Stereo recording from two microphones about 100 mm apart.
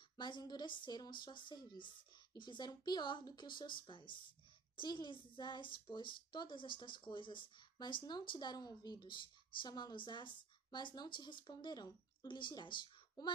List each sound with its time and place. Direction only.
0.2 s speech: 45° left (ahead or behind)